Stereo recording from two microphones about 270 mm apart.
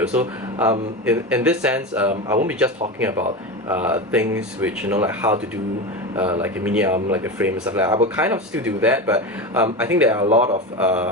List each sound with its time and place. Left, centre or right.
0.0 s speech: centre
6.4 s speech: centre
10.2 s speech: right
10.8 s speech: centre